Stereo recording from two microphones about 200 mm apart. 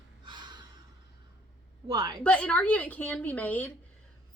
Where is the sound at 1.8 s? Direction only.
20° right (ahead or behind).